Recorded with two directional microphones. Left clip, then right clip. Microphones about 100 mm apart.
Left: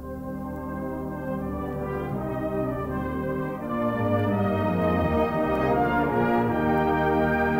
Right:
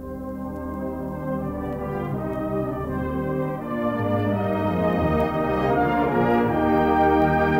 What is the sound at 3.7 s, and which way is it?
Music, 30° right (ahead or behind).